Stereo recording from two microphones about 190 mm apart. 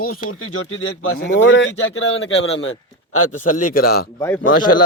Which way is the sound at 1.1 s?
70° left (ahead or behind).